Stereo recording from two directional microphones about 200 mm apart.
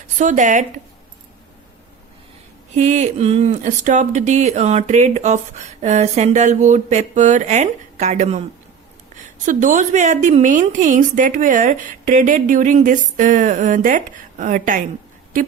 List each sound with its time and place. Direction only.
0.2 s speech: 40° right (ahead or behind)
2.7 s speech: 35° right (ahead or behind)